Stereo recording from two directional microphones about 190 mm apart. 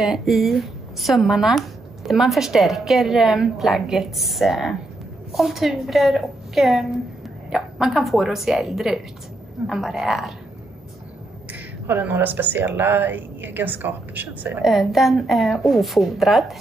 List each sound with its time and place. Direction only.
0.0 s a woman's voice: centre (ahead or behind)
11.9 s a woman's voice: 10° right (ahead or behind)